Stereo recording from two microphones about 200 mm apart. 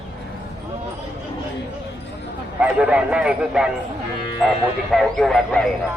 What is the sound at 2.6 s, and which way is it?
Speech, 5° right (ahead or behind).